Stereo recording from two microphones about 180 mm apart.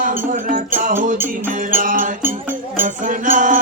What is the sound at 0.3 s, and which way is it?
Music, 45° right (ahead or behind).